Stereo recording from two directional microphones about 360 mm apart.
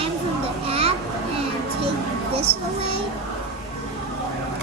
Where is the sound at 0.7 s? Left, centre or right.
Centre.